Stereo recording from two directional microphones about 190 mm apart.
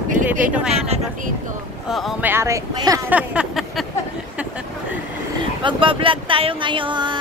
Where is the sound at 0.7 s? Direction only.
35° right (ahead or behind).